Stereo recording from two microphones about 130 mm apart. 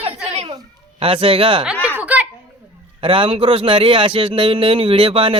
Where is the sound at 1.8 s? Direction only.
10° right (ahead or behind).